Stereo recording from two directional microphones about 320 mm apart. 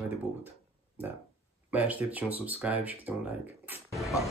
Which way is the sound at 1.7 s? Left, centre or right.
Centre.